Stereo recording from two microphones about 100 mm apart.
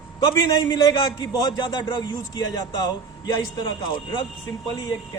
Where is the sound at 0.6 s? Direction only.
40° left (ahead or behind).